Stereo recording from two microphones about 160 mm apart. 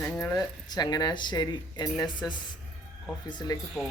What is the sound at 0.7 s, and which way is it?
Speech, 25° left (ahead or behind).